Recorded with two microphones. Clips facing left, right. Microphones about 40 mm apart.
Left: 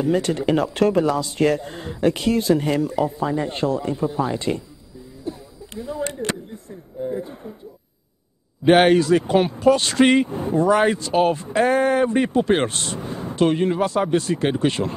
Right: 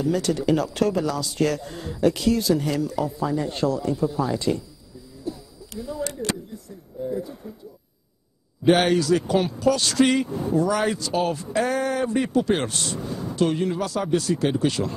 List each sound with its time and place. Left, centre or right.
0.0 s speech: left
5.2 s a sound: left
8.6 s speech: left